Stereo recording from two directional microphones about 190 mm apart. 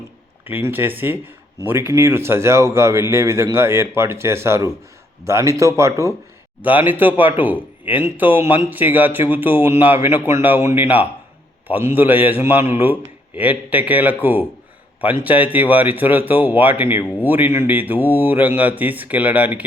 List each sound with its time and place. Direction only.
0.4 s a man's voice: 10° right (ahead or behind)